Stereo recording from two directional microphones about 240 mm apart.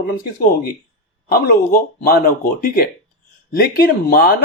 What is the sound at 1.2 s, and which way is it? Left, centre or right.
Speech, left.